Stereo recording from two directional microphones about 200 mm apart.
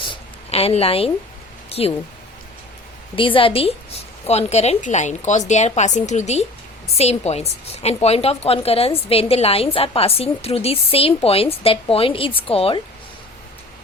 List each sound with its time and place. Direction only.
0.1 s a sound: 30° left (ahead or behind)
1.7 s speech: 30° left (ahead or behind)
3.2 s a woman's voice: 25° left (ahead or behind)